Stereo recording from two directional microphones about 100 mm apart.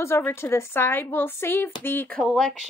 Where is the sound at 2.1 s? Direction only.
5° left (ahead or behind).